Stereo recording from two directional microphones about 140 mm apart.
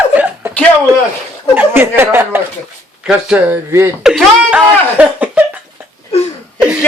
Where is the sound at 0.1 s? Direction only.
10° right (ahead or behind).